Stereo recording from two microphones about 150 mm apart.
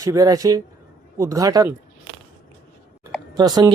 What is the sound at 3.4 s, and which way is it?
Speech, 25° right (ahead or behind).